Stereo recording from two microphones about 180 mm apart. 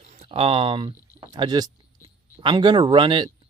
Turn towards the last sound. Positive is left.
turn(degrees=-25)  # may be behind; listen again after turning